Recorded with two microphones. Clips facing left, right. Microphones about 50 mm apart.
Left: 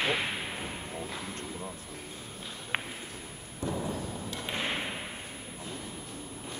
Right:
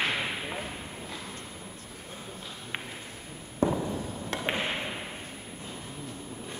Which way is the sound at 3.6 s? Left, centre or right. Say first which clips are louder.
Right 6 dB; right.